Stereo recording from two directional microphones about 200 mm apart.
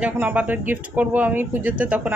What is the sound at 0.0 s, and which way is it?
Speech, 10° right (ahead or behind).